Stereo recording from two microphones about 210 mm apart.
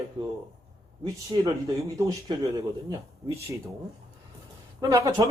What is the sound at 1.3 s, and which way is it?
Speech, 20° right (ahead or behind).